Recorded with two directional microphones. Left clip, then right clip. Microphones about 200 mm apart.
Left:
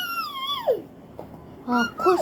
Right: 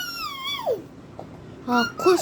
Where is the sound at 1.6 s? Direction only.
30° right (ahead or behind).